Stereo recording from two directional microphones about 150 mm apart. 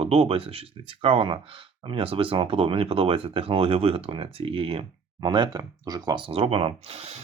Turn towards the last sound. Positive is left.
turn(degrees=-45)  # may be behind; listen again after turning